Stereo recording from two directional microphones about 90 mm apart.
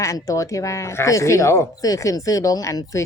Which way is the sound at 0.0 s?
35° left (ahead or behind).